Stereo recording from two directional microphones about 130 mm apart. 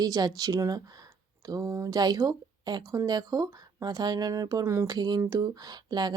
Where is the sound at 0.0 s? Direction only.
30° right (ahead or behind).